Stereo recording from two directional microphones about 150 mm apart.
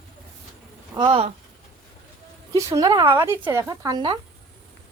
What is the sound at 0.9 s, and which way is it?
Speech, 35° right (ahead or behind).